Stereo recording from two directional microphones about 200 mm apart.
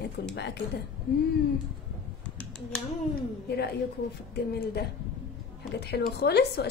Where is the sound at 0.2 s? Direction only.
60° left (ahead or behind).